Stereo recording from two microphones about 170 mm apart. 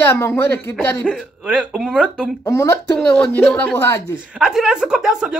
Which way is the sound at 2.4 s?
15° left (ahead or behind).